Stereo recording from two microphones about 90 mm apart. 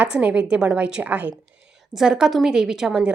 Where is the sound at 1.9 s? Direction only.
5° right (ahead or behind).